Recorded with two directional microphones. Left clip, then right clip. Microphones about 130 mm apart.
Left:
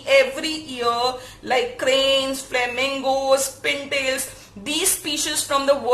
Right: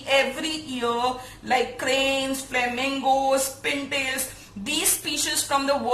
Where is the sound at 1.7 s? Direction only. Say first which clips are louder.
Left 5 dB; 35° left (ahead or behind).